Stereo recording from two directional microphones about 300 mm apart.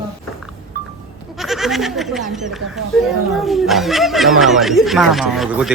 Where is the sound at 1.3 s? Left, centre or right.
Centre.